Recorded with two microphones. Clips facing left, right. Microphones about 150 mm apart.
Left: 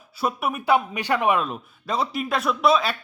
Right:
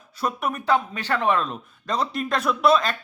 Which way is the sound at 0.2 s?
5° left (ahead or behind).